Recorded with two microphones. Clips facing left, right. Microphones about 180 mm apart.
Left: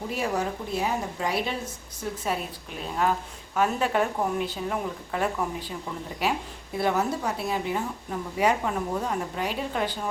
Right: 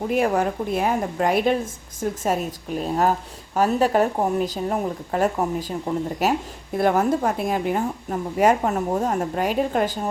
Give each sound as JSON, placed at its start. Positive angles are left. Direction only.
{"t": 0.1, "sound": "a woman's voice", "side_deg": -55}